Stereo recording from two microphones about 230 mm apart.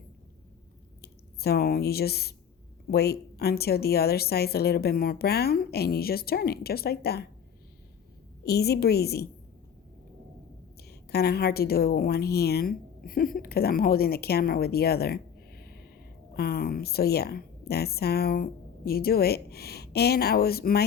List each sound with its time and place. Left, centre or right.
1.0 s speech: left
8.4 s speech: left
10.8 s a woman's voice: left